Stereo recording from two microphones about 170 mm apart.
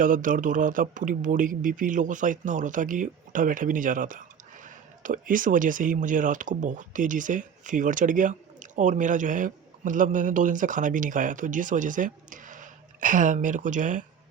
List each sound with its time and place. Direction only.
0.0 s speech: 50° right (ahead or behind)